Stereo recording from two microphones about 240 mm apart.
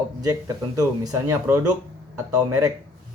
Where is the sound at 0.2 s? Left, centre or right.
Centre.